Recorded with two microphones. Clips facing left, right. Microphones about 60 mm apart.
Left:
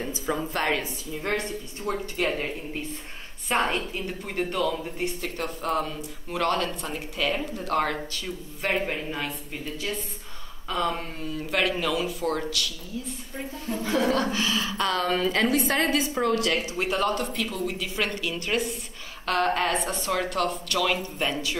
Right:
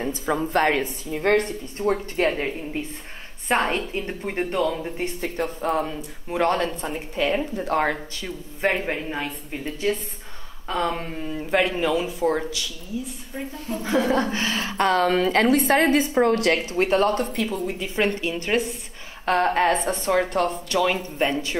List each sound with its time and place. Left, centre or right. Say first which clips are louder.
0.5 s a woman's voice: right 6 dB; right
1.9 s speech: right 5 dB; right
3.6 s speech: right 3 dB; right
10.7 s speech: right 2 dB; right
13.8 s a woman's voice: right 3 dB; right